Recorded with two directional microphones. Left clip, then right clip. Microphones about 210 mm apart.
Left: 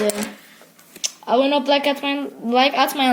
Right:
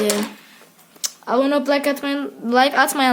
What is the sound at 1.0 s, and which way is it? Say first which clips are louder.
A woman's voice: left 1 dB; 15° right (ahead or behind).